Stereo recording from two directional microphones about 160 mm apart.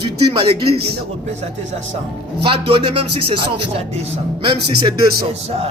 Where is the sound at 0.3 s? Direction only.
35° right (ahead or behind).